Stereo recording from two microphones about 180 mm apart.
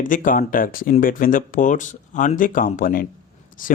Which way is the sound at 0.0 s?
50° left (ahead or behind).